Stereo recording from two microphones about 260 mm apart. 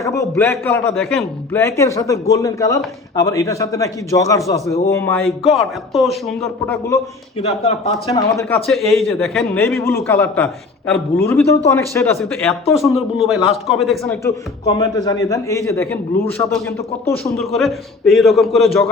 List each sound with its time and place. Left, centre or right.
0.0 s a man's voice: centre
7.4 s speech: left
8.0 s a man's voice: centre
14.3 s a man's voice: centre